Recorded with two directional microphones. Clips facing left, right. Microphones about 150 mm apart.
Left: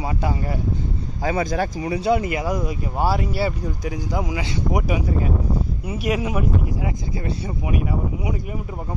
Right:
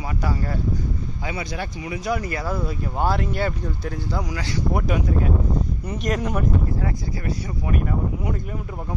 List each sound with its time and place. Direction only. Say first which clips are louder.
0.0 s speech: left 2 dB; 20° left (ahead or behind)
1.2 s speech: left 9 dB; 45° left (ahead or behind); by 4.8 s 20° left (ahead or behind)
4.8 s speech: even; 5° left (ahead or behind)